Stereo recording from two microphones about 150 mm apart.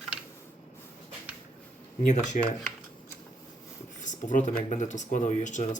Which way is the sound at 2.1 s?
50° left (ahead or behind).